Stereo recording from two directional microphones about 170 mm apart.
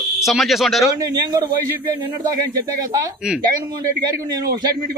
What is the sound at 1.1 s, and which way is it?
Speech, 20° right (ahead or behind).